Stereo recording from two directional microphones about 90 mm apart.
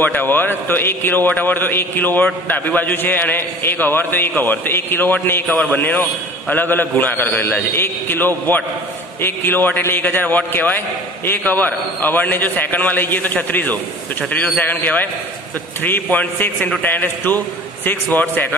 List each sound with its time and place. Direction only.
0.0 s a man's voice: 20° left (ahead or behind)